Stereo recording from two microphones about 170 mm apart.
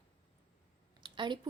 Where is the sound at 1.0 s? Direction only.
25° right (ahead or behind).